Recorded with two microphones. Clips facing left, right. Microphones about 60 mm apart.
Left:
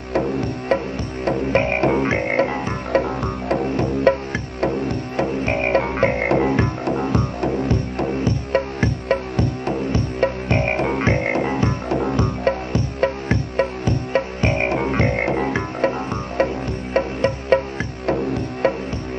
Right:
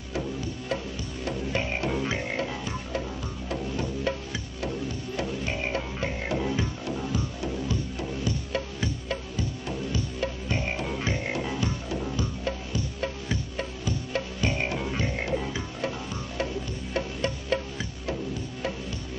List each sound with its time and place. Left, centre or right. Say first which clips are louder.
0.1 s music: left 11 dB; left